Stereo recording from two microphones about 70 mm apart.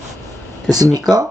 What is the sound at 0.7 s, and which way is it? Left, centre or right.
Speech, right.